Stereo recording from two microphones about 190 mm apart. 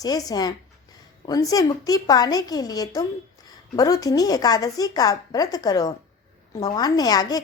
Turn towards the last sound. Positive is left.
turn(degrees=20)  # may be behind; listen again after turning